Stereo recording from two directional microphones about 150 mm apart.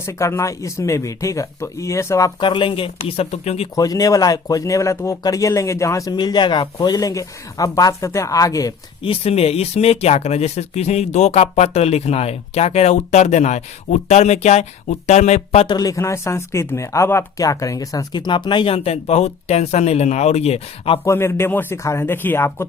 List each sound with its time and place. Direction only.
0.0 s speech: 20° left (ahead or behind); by 3.7 s 45° left (ahead or behind)
3.8 s speech: 25° left (ahead or behind)
9.0 s speech: 40° left (ahead or behind)
15.6 s speech: 25° left (ahead or behind)
21.0 s speech: 15° left (ahead or behind)